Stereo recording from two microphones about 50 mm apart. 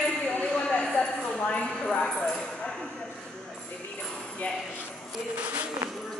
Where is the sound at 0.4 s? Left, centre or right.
Left.